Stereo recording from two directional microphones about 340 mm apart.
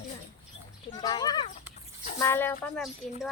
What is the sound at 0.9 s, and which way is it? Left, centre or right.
Speech, centre.